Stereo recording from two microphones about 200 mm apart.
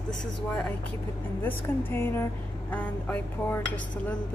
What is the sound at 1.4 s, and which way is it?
Speech, 10° left (ahead or behind).